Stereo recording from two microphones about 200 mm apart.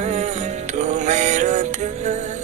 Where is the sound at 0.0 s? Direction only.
35° right (ahead or behind).